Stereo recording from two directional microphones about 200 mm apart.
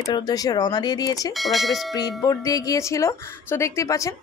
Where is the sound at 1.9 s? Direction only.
20° left (ahead or behind).